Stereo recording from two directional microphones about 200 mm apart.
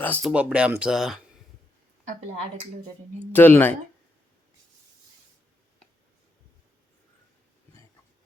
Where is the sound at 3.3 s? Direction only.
10° left (ahead or behind).